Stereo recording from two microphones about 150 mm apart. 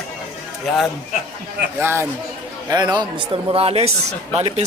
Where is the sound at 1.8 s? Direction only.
15° right (ahead or behind).